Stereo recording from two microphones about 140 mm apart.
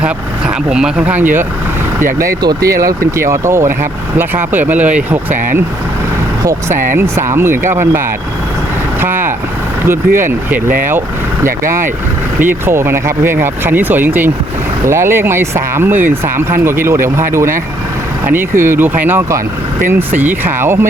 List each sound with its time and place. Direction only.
0.0 s speech: 5° right (ahead or behind)
2.1 s speech: 25° right (ahead or behind)
6.4 s speech: 20° right (ahead or behind)
9.0 s vehicle: 15° right (ahead or behind)
9.8 s speech: 15° right (ahead or behind)
12.4 s speech: 15° right (ahead or behind)